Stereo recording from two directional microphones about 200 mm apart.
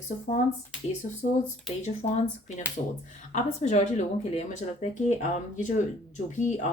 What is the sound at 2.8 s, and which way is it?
Speech, 35° left (ahead or behind).